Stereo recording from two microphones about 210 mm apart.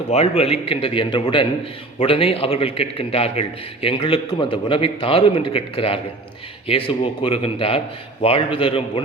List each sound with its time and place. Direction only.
0.1 s a man's voice: 30° left (ahead or behind)